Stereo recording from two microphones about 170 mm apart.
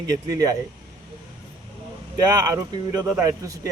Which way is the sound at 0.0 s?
20° right (ahead or behind).